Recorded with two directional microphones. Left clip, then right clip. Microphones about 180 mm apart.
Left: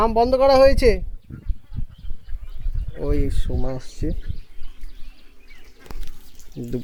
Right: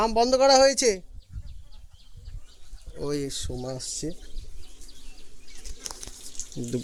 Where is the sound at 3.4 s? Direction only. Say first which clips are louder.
Left 3 dB; 15° left (ahead or behind).